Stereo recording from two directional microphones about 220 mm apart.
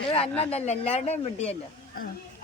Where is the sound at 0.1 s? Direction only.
25° left (ahead or behind).